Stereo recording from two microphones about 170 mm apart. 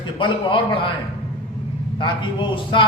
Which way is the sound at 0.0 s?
30° left (ahead or behind).